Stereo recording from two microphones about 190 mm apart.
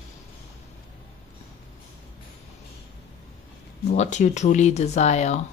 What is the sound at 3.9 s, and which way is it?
Speech, 40° left (ahead or behind).